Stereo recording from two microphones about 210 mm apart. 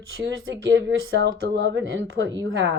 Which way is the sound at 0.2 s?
55° right (ahead or behind).